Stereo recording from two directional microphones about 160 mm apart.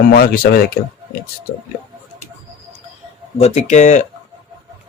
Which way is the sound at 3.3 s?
40° left (ahead or behind).